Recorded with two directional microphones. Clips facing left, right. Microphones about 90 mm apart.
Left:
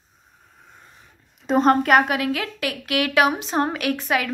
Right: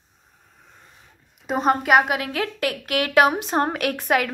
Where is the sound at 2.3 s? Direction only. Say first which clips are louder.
Right 1 dB; 40° right (ahead or behind).